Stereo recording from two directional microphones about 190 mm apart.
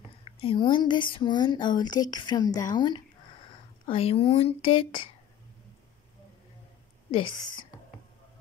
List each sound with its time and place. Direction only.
0.4 s speech: 30° left (ahead or behind)
7.1 s speech: 25° left (ahead or behind)